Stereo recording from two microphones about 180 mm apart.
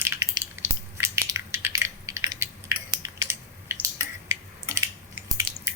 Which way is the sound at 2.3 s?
20° right (ahead or behind).